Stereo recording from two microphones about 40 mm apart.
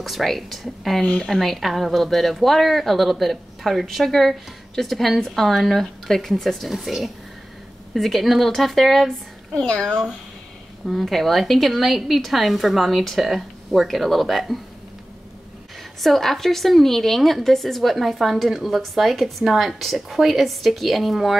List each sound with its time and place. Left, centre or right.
0.0 s a woman's voice: centre
9.6 s a child's voice: left
10.9 s a woman's voice: centre
16.0 s a woman's voice: centre